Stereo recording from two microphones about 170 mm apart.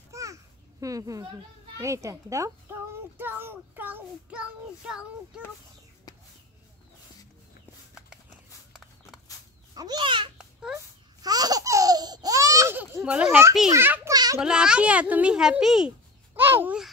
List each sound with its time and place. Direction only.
0.1 s babbling: 20° right (ahead or behind)
1.8 s a child's voice: 20° right (ahead or behind)
7.9 s a sound: centre (ahead or behind)
9.8 s a child's voice: 25° right (ahead or behind)
10.3 s baby cry: 5° right (ahead or behind)
11.2 s laughter: 20° right (ahead or behind)
13.7 s a child's voice: 15° right (ahead or behind)
14.1 s a sound: 25° right (ahead or behind)
14.4 s a child's voice: 5° right (ahead or behind)